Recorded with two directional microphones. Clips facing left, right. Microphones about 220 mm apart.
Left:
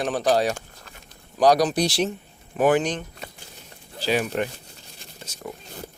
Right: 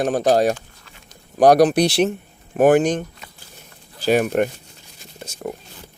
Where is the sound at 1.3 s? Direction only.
55° right (ahead or behind).